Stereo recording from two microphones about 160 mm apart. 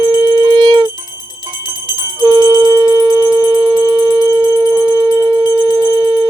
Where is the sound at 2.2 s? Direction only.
25° right (ahead or behind).